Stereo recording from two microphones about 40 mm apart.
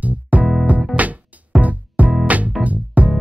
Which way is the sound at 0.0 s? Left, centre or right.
Right.